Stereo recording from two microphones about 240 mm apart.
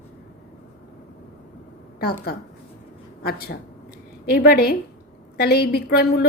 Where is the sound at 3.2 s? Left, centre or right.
Left.